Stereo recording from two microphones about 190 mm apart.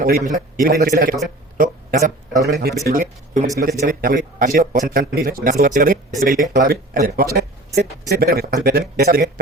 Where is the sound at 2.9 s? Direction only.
45° right (ahead or behind).